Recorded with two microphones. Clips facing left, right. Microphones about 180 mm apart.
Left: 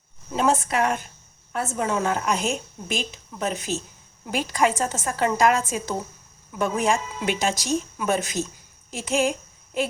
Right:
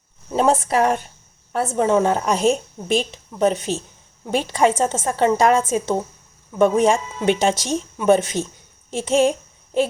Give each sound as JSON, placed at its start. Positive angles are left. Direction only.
{"t": 0.3, "sound": "a woman's voice", "side_deg": -35}